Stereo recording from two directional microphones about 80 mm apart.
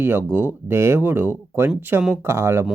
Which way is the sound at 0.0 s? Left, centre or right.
Right.